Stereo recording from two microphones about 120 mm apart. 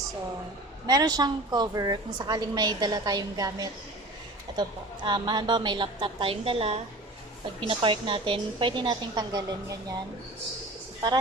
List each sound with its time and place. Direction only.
0.9 s a woman's voice: 30° right (ahead or behind)
5.0 s a woman's voice: 40° right (ahead or behind)